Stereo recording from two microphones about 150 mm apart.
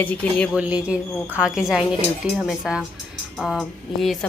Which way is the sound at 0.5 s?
10° right (ahead or behind).